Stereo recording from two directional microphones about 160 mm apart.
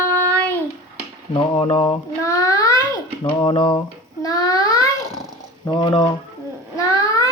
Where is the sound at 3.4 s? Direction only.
30° left (ahead or behind).